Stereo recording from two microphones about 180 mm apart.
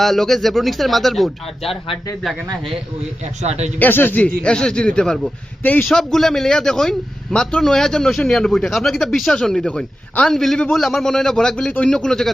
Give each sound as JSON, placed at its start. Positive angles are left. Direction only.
{"t": 0.0, "sound": "a man's voice", "side_deg": 0}
{"t": 1.6, "sound": "speech", "side_deg": 30}
{"t": 2.3, "sound": "a man's voice", "side_deg": 0}
{"t": 3.4, "sound": "speech", "side_deg": -35}
{"t": 3.8, "sound": "a man's voice", "side_deg": 10}